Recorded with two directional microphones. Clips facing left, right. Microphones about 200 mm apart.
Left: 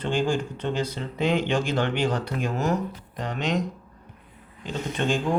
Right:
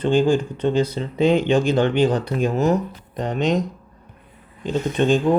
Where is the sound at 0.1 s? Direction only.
20° right (ahead or behind).